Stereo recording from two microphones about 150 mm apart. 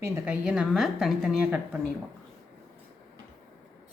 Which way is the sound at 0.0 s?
20° right (ahead or behind).